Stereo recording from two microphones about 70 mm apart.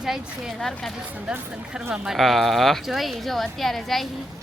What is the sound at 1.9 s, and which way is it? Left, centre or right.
Speech, centre.